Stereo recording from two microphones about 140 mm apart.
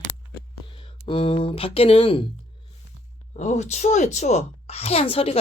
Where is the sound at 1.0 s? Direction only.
40° left (ahead or behind).